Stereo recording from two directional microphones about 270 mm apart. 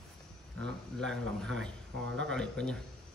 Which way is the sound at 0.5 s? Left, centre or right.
Centre.